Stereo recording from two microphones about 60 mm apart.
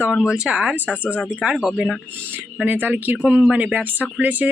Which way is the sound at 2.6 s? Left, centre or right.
Right.